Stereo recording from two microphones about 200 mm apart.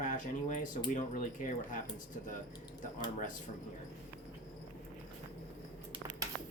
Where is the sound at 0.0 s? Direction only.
40° left (ahead or behind).